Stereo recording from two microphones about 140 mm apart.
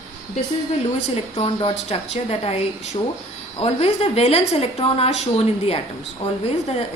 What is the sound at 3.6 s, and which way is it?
Speech, 45° left (ahead or behind).